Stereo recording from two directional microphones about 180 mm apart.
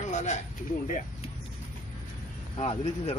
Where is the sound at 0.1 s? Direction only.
40° left (ahead or behind).